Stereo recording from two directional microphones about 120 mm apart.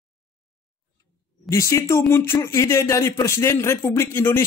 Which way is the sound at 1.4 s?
25° left (ahead or behind).